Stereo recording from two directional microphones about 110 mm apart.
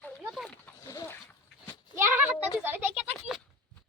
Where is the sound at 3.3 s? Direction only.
Centre (ahead or behind).